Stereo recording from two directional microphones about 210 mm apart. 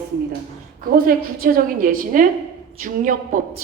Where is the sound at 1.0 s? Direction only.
40° right (ahead or behind).